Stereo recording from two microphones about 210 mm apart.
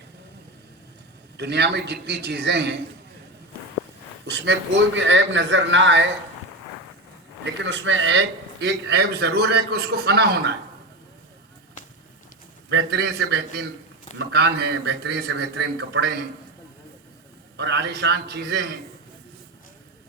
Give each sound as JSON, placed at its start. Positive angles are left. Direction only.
{"t": 1.4, "sound": "a man's voice", "side_deg": -55}
{"t": 4.3, "sound": "a man's voice", "side_deg": -55}
{"t": 7.4, "sound": "a man's voice", "side_deg": -60}
{"t": 8.6, "sound": "a man's voice", "side_deg": -55}
{"t": 12.7, "sound": "a man's voice", "side_deg": -55}
{"t": 17.6, "sound": "a man's voice", "side_deg": -55}